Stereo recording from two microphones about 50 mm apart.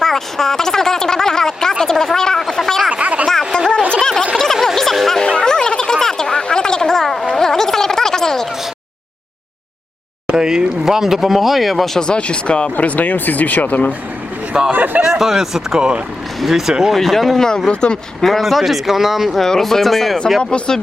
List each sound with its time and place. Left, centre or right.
0.0 s a sound: centre
2.9 s a sound: right
3.2 s a sound: centre
4.6 s music: centre
5.2 s a sound: centre
10.2 s speech: centre
11.9 s speech: centre
12.7 s speech: left
14.7 s speech: right
15.0 s speech: centre
16.9 s speech: centre
18.2 s speech: centre
19.5 s speech: centre
20.4 s speech: centre